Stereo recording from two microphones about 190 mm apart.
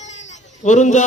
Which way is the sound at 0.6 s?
40° left (ahead or behind).